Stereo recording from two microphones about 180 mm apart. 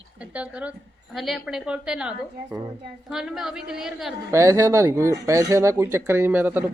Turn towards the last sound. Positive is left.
turn(degrees=-10)  # may be behind; listen again after turning